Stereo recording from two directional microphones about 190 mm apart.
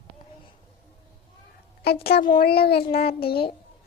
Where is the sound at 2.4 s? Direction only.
55° left (ahead or behind).